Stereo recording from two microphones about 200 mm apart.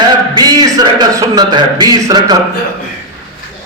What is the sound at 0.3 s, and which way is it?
A man's voice, 20° right (ahead or behind).